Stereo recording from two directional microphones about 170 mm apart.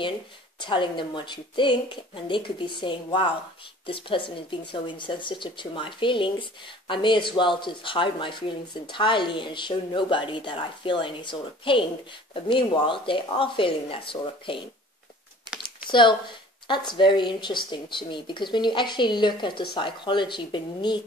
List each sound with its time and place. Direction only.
0.6 s speech: 30° left (ahead or behind)
15.9 s speech: 30° left (ahead or behind)